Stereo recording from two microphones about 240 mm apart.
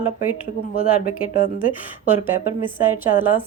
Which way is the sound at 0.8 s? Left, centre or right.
Left.